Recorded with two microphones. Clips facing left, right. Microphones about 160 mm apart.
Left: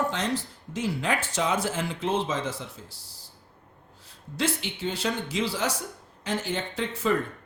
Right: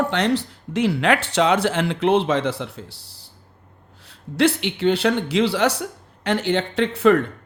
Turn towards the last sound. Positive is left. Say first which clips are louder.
# right 10 dB
turn(degrees=-65)  # may be behind; listen again after turning